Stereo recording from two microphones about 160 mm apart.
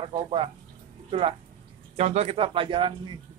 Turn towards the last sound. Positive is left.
turn(degrees=-30)  # may be behind; listen again after turning